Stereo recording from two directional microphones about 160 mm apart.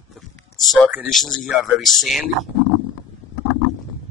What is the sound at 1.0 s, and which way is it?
A man's voice, 5° left (ahead or behind).